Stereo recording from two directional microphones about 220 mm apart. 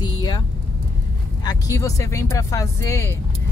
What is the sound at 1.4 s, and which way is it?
Speech, 15° left (ahead or behind).